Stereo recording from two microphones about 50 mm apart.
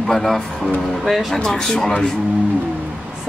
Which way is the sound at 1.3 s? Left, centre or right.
Centre.